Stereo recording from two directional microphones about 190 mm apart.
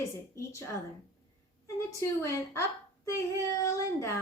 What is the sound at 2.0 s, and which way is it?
Speech, 15° left (ahead or behind).